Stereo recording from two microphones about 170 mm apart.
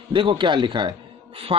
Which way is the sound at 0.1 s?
30° right (ahead or behind).